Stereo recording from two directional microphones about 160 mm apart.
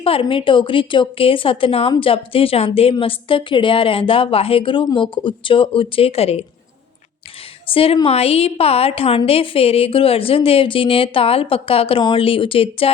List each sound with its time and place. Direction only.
0.0 s a woman's voice: 35° left (ahead or behind)
7.7 s a woman's voice: 35° left (ahead or behind)